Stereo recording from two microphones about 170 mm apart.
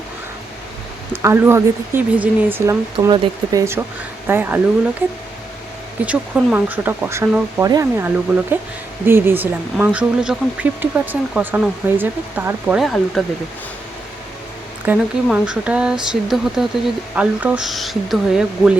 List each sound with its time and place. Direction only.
1.1 s speech: 15° right (ahead or behind)
2.9 s speech: 30° right (ahead or behind); by 5.0 s 10° right (ahead or behind)
6.1 s speech: 10° right (ahead or behind)
14.8 s speech: 5° right (ahead or behind)